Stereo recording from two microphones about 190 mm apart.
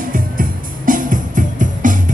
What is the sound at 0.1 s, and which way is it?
Music, 45° right (ahead or behind).